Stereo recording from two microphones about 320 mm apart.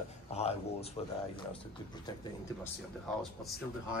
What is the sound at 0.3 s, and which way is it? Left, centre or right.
Speech, centre.